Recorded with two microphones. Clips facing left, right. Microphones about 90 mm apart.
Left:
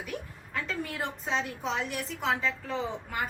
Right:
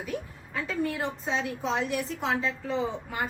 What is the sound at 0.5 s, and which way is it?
Speech, 10° right (ahead or behind).